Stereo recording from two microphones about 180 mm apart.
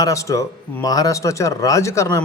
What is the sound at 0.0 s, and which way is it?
Speech, 20° left (ahead or behind).